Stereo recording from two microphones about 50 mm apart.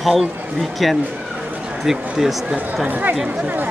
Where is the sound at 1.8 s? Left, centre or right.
Centre.